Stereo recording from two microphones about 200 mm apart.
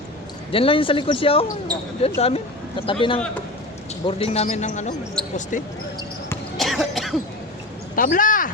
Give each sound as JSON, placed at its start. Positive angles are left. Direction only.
{"t": 0.5, "sound": "speech", "side_deg": 25}
{"t": 5.2, "sound": "basketball bounce", "side_deg": 5}
{"t": 6.6, "sound": "cough", "side_deg": 0}
{"t": 7.9, "sound": "speech", "side_deg": 45}